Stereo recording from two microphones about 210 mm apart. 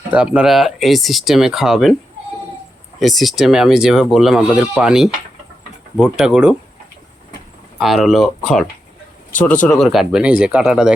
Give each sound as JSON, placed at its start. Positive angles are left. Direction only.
{"t": 0.1, "sound": "speech", "side_deg": -5}
{"t": 3.0, "sound": "speech", "side_deg": 0}
{"t": 7.8, "sound": "speech", "side_deg": 0}